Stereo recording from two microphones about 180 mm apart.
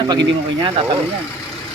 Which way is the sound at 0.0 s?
25° right (ahead or behind).